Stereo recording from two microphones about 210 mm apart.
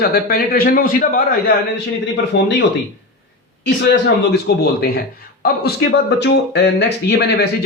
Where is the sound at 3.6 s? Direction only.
55° left (ahead or behind).